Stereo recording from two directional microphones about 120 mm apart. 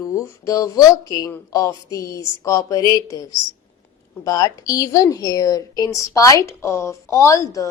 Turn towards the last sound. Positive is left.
turn(degrees=25)  # may be behind; listen again after turning